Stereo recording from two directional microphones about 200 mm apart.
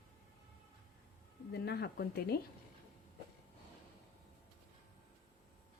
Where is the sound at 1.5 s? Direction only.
55° left (ahead or behind).